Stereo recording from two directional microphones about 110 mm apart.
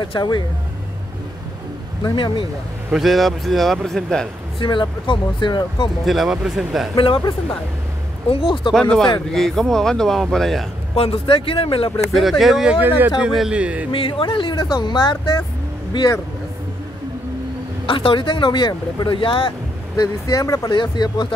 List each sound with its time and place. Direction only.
0.0 s speech: 40° left (ahead or behind)
2.1 s speech: 45° left (ahead or behind)
2.9 s speech: centre (ahead or behind)
4.6 s speech: 50° left (ahead or behind)
6.0 s speech: centre (ahead or behind)
7.0 s speech: 50° left (ahead or behind)
8.7 s speech: 5° left (ahead or behind)
11.0 s speech: 60° left (ahead or behind)
12.1 s speech: centre (ahead or behind)
12.8 s speech: 15° right (ahead or behind)
13.2 s speech: 5° right (ahead or behind)
13.9 s speech: 50° left (ahead or behind)
17.8 s speech: 50° left (ahead or behind)
20.0 s speech: 30° left (ahead or behind)